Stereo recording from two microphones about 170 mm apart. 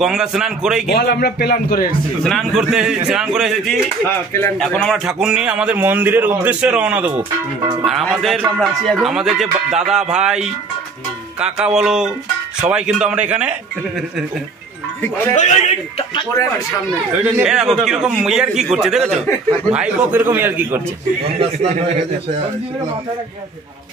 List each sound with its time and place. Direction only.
0.0 s a man's voice: 5° right (ahead or behind)
0.8 s speech: 70° left (ahead or behind)
2.2 s a man's voice: centre (ahead or behind)
4.3 s speech: 15° left (ahead or behind)
4.6 s a man's voice: centre (ahead or behind)
15.3 s a man's voice: 45° left (ahead or behind)
16.2 s speech: 20° left (ahead or behind)
17.2 s a man's voice: 5° right (ahead or behind)